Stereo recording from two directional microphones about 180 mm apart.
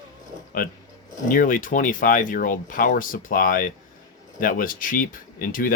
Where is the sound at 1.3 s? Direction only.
50° left (ahead or behind).